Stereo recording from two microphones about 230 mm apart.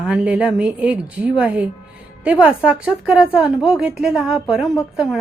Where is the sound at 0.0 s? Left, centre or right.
Centre.